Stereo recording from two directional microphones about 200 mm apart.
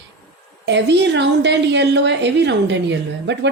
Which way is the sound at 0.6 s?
60° right (ahead or behind).